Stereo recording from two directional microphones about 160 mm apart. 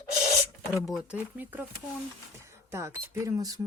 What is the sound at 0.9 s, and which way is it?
Speech, 10° right (ahead or behind).